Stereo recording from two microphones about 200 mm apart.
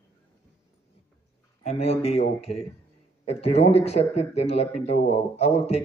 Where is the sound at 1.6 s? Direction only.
30° left (ahead or behind).